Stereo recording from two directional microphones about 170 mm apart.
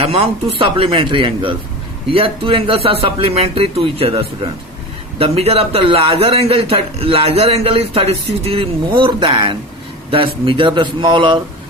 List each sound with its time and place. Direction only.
0.0 s a man's voice: 35° right (ahead or behind)
5.2 s a man's voice: 35° right (ahead or behind)